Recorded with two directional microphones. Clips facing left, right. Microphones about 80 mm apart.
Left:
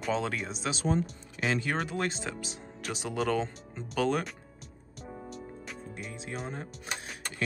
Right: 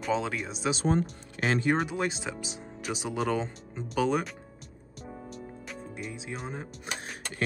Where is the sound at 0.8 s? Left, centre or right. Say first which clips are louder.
Even; right.